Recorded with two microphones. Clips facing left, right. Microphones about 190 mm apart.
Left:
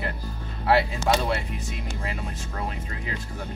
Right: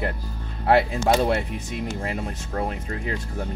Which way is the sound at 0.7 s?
55° right (ahead or behind).